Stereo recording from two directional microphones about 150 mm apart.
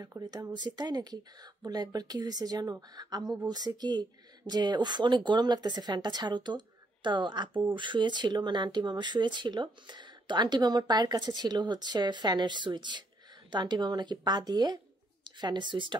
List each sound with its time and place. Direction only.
0.0 s speech: 25° right (ahead or behind)